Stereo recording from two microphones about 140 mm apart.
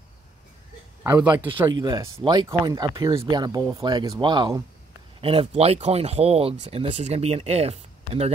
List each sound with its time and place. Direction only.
1.0 s speech: 15° right (ahead or behind)
1.7 s speech: 30° right (ahead or behind)
5.2 s speech: 40° right (ahead or behind)